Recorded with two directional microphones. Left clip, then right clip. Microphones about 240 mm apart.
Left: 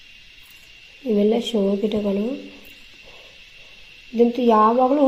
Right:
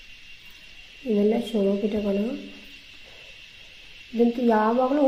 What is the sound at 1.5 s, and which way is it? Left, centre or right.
Speech, left.